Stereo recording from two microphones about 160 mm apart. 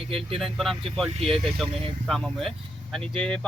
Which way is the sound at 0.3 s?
Centre (ahead or behind).